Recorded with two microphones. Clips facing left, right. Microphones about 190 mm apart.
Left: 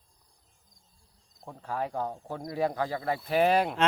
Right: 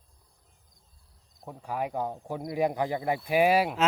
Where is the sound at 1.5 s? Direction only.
10° right (ahead or behind).